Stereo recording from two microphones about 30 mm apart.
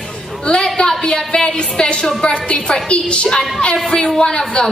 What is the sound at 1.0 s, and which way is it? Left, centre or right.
A woman's voice, left.